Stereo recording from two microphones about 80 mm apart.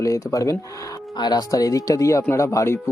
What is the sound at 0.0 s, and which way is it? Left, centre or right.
Speech, left.